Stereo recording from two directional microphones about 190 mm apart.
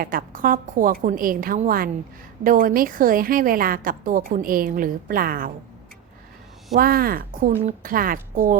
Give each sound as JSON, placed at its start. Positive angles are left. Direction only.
{"t": 0.0, "sound": "a woman's voice", "side_deg": -45}
{"t": 6.7, "sound": "a woman's voice", "side_deg": -50}